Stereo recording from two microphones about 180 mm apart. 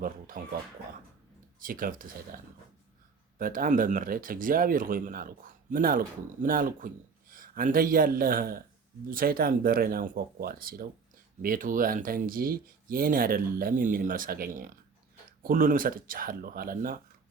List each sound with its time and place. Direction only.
0.4 s speech: 45° right (ahead or behind)
1.5 s speech: 50° right (ahead or behind)